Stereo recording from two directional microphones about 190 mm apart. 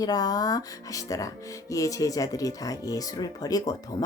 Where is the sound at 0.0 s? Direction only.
20° left (ahead or behind).